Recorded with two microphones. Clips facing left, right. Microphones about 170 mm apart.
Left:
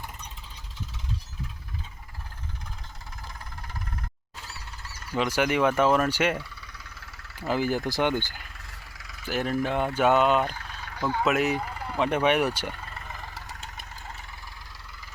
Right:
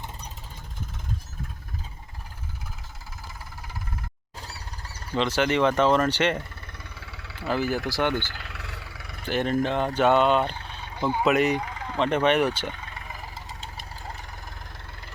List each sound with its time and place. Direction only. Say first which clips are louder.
4.4 s a sound: right 3 dB; 35° right (ahead or behind)
5.1 s speech: right 1 dB; 10° left (ahead or behind)
6.4 s vehicle: right 2 dB; 50° right (ahead or behind); by 7.4 s 65° right (ahead or behind)
7.4 s speech: even; 15° left (ahead or behind)
8.4 s vehicle: right 7 dB; 70° right (ahead or behind)
9.3 s speech: right 2 dB; 5° left (ahead or behind)
10.4 s vehicle: right 1 dB; 25° right (ahead or behind)
11.3 s speech: right 4 dB; 5° left (ahead or behind)
13.1 s vehicle: right 1 dB; 10° right (ahead or behind)
13.6 s vehicle: right 2 dB; 35° right (ahead or behind)